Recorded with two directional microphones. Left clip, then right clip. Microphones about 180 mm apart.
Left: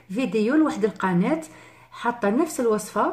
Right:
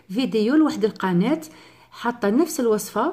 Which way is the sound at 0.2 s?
30° right (ahead or behind).